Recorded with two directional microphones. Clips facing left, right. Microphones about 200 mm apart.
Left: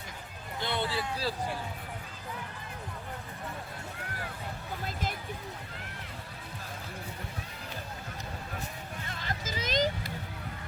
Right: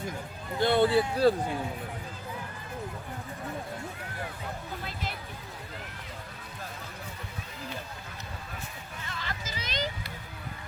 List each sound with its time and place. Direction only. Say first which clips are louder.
0.6 s speech: right 10 dB; 50° right (ahead or behind)
9.2 s vehicle: left 5 dB; 45° left (ahead or behind)